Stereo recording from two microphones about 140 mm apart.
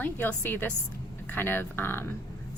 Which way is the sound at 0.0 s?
10° left (ahead or behind).